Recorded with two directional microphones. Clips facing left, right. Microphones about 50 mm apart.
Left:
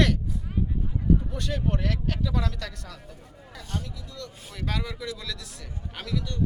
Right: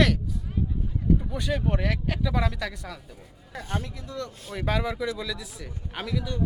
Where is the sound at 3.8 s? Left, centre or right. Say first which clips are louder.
Right 5 dB; right.